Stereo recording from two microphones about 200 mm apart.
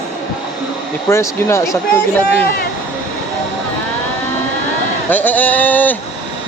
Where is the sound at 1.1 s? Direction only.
15° left (ahead or behind).